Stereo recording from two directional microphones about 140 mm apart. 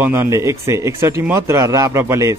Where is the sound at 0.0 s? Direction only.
15° right (ahead or behind).